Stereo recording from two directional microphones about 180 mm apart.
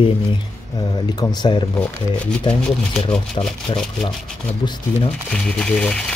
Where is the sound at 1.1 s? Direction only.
25° left (ahead or behind).